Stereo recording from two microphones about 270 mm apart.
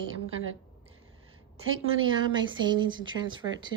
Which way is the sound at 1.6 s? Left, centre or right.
Right.